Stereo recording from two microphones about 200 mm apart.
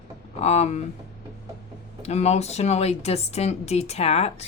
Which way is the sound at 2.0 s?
35° left (ahead or behind).